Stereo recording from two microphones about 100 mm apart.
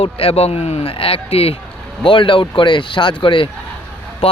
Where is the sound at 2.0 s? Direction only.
55° left (ahead or behind).